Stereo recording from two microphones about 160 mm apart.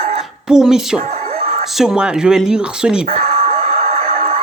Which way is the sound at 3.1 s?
40° right (ahead or behind).